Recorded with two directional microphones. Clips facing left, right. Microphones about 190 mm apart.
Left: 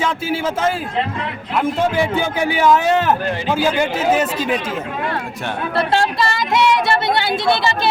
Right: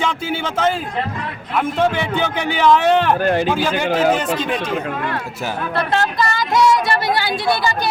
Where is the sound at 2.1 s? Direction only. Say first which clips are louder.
Left 2 dB; 10° left (ahead or behind).